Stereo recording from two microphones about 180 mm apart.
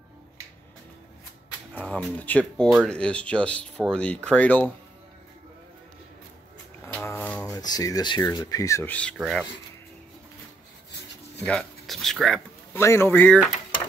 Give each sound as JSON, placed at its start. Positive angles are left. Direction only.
{"t": 1.7, "sound": "speech", "side_deg": 10}
{"t": 6.9, "sound": "speech", "side_deg": 10}
{"t": 11.4, "sound": "speech", "side_deg": 5}
{"t": 12.7, "sound": "speech", "side_deg": 15}